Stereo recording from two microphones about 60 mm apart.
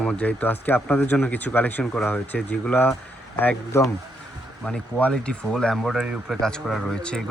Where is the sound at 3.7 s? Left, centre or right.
Left.